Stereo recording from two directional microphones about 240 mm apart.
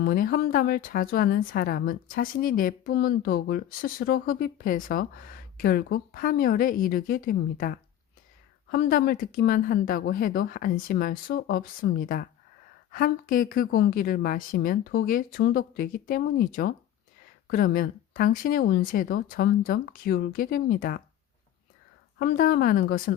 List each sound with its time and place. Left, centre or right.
0.0 s speech: left
22.2 s speech: left